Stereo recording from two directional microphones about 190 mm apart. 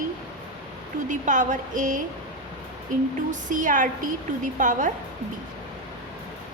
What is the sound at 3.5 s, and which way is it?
A woman's voice, 45° right (ahead or behind).